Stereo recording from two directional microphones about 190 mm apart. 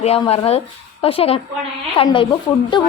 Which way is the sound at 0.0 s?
30° left (ahead or behind).